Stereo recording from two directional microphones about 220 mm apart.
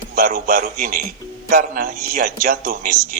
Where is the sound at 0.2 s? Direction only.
40° right (ahead or behind).